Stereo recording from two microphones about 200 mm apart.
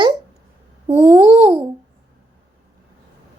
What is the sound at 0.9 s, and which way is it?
Babbling, 10° right (ahead or behind).